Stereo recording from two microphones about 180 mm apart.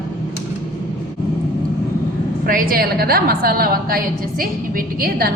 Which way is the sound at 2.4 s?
50° right (ahead or behind).